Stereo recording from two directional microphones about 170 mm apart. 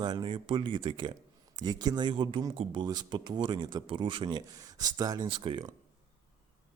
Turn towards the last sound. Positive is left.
turn(degrees=-30)  # may be behind; listen again after turning